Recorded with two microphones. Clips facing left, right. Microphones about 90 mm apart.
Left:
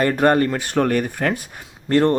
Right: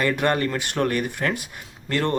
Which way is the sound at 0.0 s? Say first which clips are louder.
Left 5 dB; 40° left (ahead or behind).